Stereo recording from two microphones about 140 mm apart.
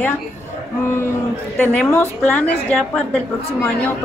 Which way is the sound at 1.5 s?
10° left (ahead or behind).